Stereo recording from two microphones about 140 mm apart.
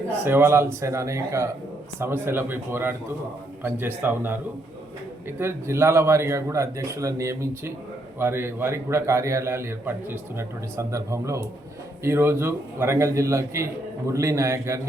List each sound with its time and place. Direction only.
0.3 s a man's voice: 15° right (ahead or behind)
5.4 s a man's voice: 15° right (ahead or behind)